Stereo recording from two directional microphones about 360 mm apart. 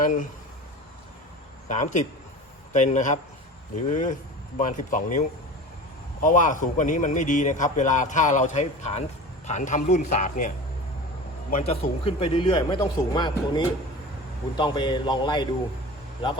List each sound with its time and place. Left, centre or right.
0.0 s a man's voice: left
1.6 s a man's voice: centre
6.2 s a man's voice: left
11.5 s a man's voice: centre